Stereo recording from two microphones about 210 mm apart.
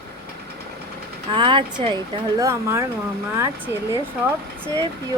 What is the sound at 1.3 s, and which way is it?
A woman's voice, 25° right (ahead or behind).